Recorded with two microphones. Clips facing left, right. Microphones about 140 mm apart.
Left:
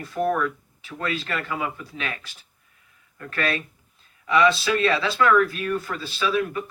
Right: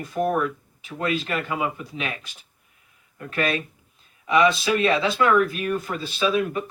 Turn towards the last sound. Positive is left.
turn(degrees=-20)  # may be behind; listen again after turning